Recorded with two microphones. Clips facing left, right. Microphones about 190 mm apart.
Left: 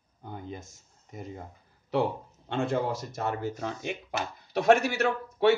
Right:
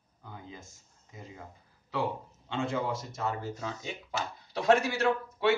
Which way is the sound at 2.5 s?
60° left (ahead or behind).